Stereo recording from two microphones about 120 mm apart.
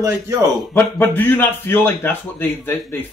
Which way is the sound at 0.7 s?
15° left (ahead or behind).